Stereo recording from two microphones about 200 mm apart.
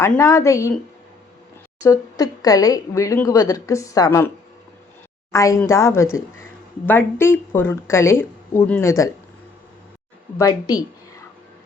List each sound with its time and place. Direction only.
0.0 s speech: 15° left (ahead or behind)
1.8 s speech: 20° left (ahead or behind)
5.3 s speech: 15° left (ahead or behind)
10.3 s a woman's voice: 15° left (ahead or behind)